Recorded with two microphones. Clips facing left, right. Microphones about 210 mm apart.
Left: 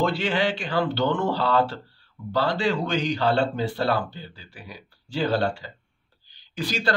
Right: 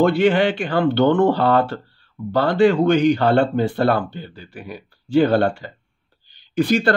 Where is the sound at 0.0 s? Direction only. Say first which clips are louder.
Right 8 dB; 55° right (ahead or behind).